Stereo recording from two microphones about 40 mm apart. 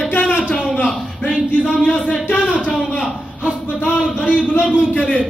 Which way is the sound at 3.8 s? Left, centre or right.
Left.